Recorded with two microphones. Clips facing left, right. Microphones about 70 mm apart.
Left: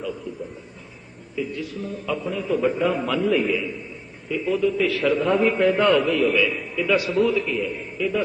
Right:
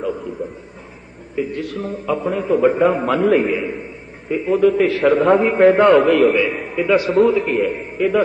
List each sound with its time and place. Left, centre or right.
0.0 s a sound: right
1.4 s a man's voice: right
3.2 s a man's voice: right
4.3 s a man's voice: right
4.6 s a man's voice: right
4.9 s a man's voice: right
6.1 s a man's voice: right
6.3 s a man's voice: right
6.6 s a sound: right
6.8 s a man's voice: right
7.5 s a man's voice: right